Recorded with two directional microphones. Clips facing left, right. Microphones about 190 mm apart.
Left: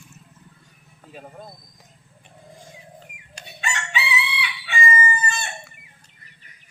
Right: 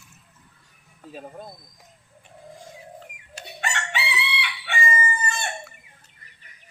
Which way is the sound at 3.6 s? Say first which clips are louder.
Left 1 dB; 60° right (ahead or behind).